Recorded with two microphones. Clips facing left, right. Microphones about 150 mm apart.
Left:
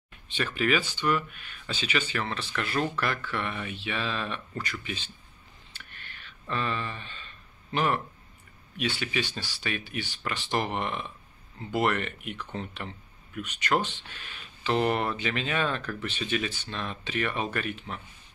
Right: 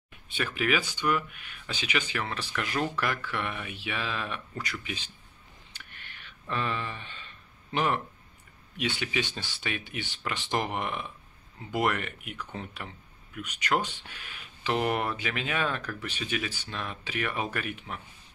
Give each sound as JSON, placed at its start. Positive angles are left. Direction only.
{"t": 0.3, "sound": "speech", "side_deg": -10}
{"t": 5.7, "sound": "a sound", "side_deg": -15}
{"t": 8.7, "sound": "speech", "side_deg": -20}